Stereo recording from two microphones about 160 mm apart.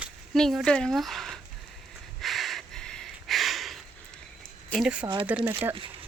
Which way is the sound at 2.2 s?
Centre (ahead or behind).